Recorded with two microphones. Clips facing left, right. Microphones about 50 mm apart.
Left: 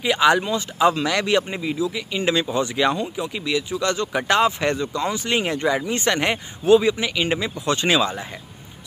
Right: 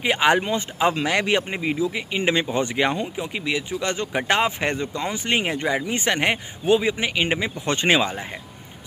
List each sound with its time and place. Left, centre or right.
0.0 s speech: right